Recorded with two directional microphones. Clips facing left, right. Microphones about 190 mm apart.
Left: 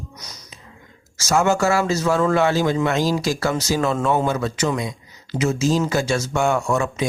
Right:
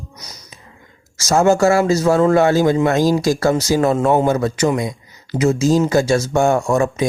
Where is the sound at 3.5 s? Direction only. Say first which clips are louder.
Right 6 dB; 35° right (ahead or behind).